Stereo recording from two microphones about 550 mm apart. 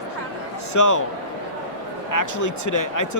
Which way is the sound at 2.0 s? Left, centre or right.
Left.